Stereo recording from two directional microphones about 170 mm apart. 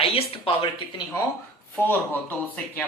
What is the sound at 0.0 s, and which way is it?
Speech, 35° left (ahead or behind).